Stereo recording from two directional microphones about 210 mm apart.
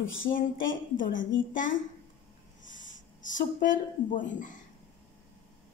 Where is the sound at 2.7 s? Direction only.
60° left (ahead or behind).